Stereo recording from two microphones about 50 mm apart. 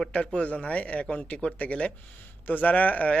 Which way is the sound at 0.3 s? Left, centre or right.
Left.